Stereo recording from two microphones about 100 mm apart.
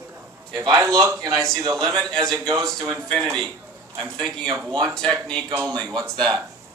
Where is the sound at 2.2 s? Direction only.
40° right (ahead or behind).